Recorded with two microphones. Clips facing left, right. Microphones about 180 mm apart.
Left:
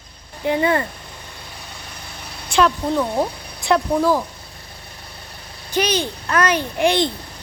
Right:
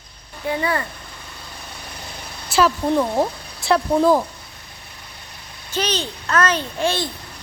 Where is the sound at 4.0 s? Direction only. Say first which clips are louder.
Right 2 dB; 20° right (ahead or behind).